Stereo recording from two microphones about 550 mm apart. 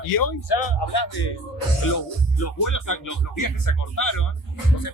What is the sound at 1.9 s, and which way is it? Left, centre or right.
Speech, left.